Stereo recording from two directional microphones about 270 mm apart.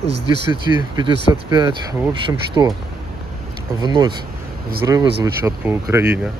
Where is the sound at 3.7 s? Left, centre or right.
Centre.